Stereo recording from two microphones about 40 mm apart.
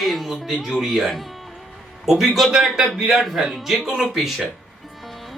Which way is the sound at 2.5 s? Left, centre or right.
Centre.